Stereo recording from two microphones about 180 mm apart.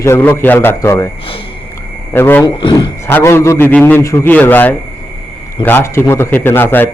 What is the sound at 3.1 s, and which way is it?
A man's voice, 10° left (ahead or behind).